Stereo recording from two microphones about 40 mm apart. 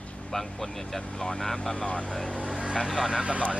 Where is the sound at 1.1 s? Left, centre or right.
Left.